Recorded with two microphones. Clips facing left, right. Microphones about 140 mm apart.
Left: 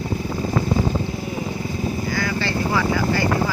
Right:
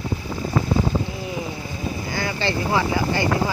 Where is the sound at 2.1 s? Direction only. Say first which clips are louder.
Right 2 dB; 25° right (ahead or behind).